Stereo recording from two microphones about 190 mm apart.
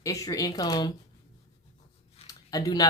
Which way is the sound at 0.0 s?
15° left (ahead or behind).